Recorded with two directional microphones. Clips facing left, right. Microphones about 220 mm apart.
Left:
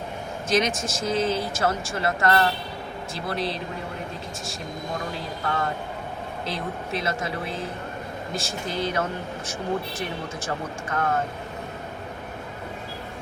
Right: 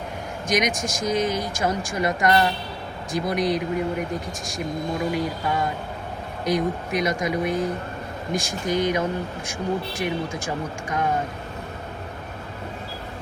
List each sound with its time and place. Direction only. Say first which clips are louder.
0.4 s speech: even; 15° right (ahead or behind)
5.1 s speech: right 4 dB; 15° right (ahead or behind)